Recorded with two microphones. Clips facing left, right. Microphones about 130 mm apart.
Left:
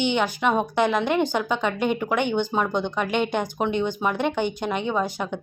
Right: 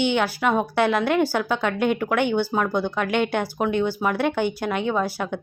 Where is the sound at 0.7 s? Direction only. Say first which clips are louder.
Right 1 dB; 15° left (ahead or behind).